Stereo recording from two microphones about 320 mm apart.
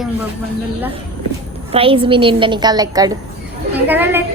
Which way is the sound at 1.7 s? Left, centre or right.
Centre.